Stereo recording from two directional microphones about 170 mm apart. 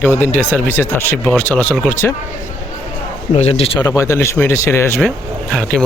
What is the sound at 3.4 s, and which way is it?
Speech, 35° left (ahead or behind).